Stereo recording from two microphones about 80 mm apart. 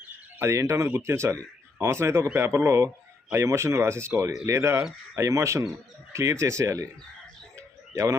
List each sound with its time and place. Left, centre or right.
0.3 s speech: right